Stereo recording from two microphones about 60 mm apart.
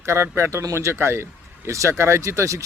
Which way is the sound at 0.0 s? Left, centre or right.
Right.